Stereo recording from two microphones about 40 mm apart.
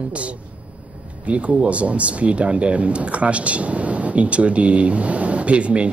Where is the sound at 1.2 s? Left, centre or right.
Right.